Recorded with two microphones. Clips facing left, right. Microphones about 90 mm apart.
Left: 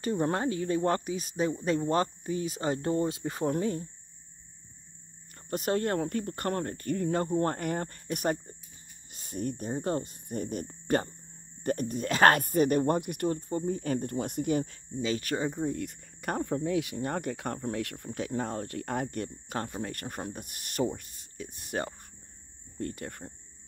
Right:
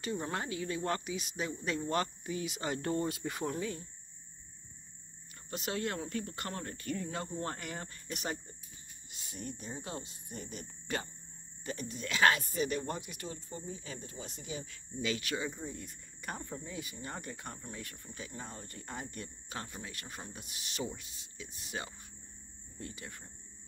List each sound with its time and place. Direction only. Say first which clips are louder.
0.0 s speech: left 8 dB; 40° left (ahead or behind)
5.5 s speech: left 8 dB; 45° left (ahead or behind)
15.0 s speech: left 6 dB; 35° left (ahead or behind)
15.6 s speech: left 12 dB; 65° left (ahead or behind)